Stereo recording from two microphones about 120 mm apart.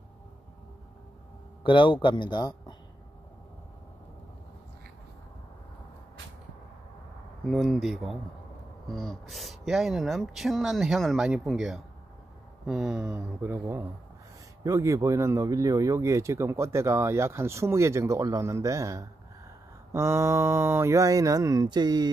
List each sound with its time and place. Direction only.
1.6 s speech: 45° left (ahead or behind)
7.4 s speech: centre (ahead or behind)
13.4 s speech: 15° right (ahead or behind); by 22.1 s 35° right (ahead or behind)